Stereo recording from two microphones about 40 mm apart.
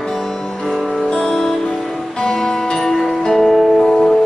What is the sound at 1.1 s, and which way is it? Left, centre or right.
Music, centre.